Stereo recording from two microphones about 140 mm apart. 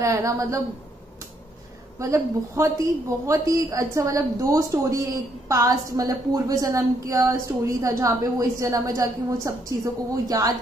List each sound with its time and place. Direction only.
0.0 s a woman's voice: 20° right (ahead or behind)
2.0 s a woman's voice: 20° right (ahead or behind)